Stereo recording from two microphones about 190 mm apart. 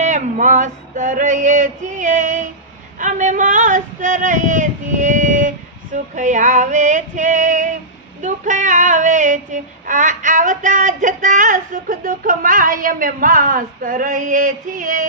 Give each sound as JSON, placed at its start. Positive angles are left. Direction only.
{"t": 0.0, "sound": "male singing", "side_deg": -40}
{"t": 3.0, "sound": "a sound", "side_deg": -40}
{"t": 8.2, "sound": "child singing", "side_deg": -40}